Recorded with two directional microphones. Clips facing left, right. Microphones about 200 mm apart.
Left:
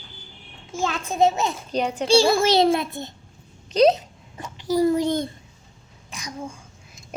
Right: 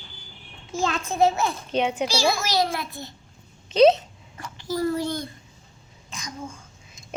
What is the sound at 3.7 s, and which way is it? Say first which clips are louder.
Speech: right 1 dB; centre (ahead or behind).